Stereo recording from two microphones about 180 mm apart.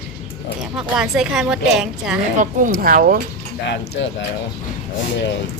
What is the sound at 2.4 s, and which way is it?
Speech, 50° right (ahead or behind).